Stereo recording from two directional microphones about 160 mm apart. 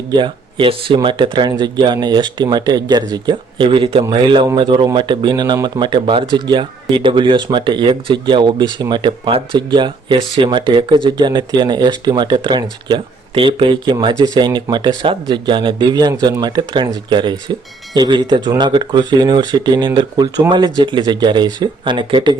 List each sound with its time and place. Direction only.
0.1 s speech: 30° right (ahead or behind)